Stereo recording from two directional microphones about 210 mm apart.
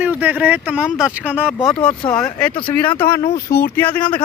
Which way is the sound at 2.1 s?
5° left (ahead or behind).